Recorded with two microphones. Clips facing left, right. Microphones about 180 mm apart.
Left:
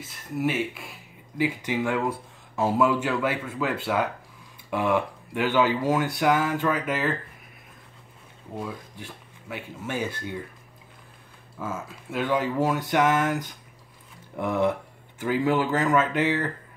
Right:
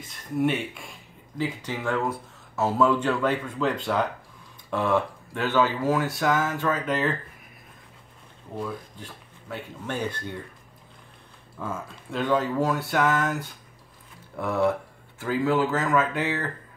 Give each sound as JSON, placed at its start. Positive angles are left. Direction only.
{"t": 0.0, "sound": "speech", "side_deg": 5}
{"t": 9.0, "sound": "speech", "side_deg": 10}
{"t": 11.6, "sound": "speech", "side_deg": 5}